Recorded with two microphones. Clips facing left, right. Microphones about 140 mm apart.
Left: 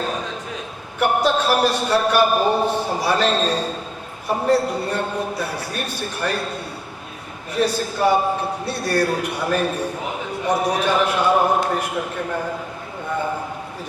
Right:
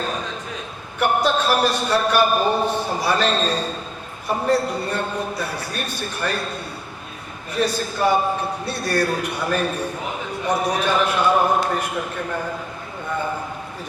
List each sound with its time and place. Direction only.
0.0 s a sound: 10° left (ahead or behind)
0.9 s a man's voice: 10° left (ahead or behind)
12.2 s a man's voice: 25° left (ahead or behind)